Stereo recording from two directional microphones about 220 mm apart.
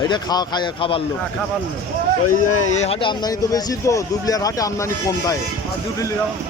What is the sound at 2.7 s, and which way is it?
Speech, 30° left (ahead or behind).